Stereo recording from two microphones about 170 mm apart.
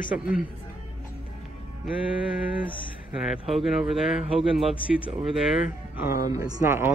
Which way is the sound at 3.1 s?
Centre (ahead or behind).